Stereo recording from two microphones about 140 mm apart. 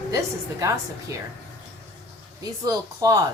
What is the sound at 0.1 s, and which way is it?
Speech, 20° right (ahead or behind).